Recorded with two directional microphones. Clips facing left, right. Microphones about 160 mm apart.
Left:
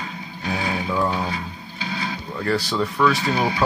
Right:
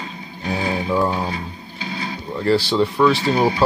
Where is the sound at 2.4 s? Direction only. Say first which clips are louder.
Right 5 dB; 30° right (ahead or behind).